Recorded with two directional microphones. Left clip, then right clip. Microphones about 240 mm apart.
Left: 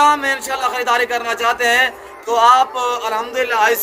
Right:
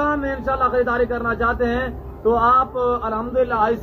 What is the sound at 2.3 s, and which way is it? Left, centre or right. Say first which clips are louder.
Speech: left 4 dB; left.